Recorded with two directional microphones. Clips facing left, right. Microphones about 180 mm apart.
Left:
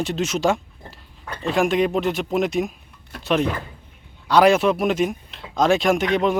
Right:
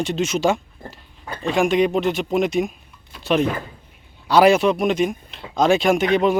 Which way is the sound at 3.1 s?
65° left (ahead or behind).